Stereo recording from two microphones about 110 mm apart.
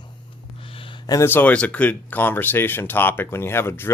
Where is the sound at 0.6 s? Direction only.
55° left (ahead or behind).